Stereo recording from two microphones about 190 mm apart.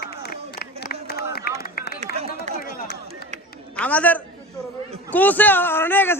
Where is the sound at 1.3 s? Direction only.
55° left (ahead or behind).